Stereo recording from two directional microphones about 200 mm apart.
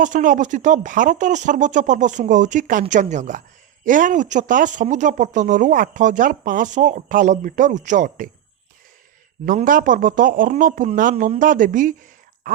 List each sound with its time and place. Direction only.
0.0 s speech: 40° right (ahead or behind)
9.5 s speech: 45° right (ahead or behind)